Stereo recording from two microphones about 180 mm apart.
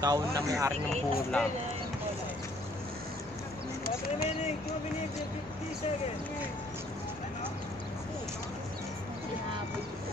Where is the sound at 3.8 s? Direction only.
60° left (ahead or behind).